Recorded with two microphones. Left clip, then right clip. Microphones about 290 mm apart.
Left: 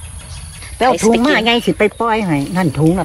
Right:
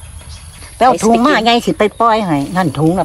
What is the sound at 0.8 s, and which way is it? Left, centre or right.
Speech, centre.